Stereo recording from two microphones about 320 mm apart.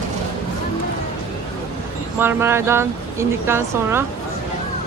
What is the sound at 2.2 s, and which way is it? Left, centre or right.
Speech, centre.